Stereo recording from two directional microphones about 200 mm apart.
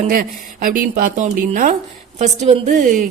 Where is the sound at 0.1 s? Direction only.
45° right (ahead or behind).